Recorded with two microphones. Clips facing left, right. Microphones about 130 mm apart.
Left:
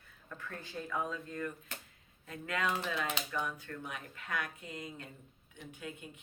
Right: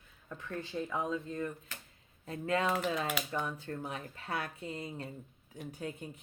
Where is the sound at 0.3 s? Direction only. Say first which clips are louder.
Right 5 dB; 20° right (ahead or behind).